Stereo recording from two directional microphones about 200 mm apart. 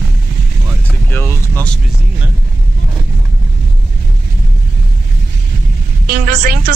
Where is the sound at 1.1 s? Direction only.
10° left (ahead or behind).